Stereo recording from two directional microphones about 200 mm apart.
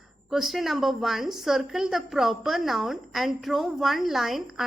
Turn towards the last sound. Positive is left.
turn(degrees=0)  # may be behind; listen again after turning